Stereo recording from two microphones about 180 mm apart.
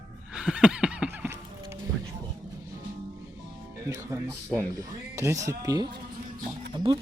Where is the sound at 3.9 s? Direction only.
15° right (ahead or behind).